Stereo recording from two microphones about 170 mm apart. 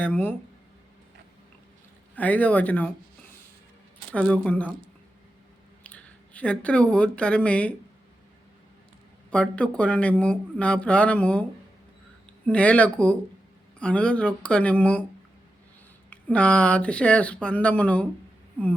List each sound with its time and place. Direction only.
0.0 s speech: 10° left (ahead or behind)
2.1 s speech: 10° left (ahead or behind)
4.1 s speech: 5° left (ahead or behind)
5.8 s speech: 10° left (ahead or behind)
9.3 s speech: 5° left (ahead or behind)
12.5 s speech: 5° left (ahead or behind)
16.0 s speech: 5° left (ahead or behind)
18.6 s a sound: 10° left (ahead or behind)